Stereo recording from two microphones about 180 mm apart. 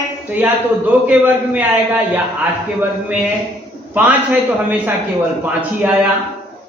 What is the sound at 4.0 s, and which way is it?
A man's voice, 10° right (ahead or behind).